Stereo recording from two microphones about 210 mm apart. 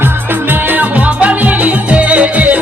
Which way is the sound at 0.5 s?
10° right (ahead or behind).